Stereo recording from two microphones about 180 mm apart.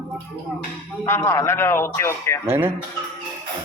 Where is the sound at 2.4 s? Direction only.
10° right (ahead or behind).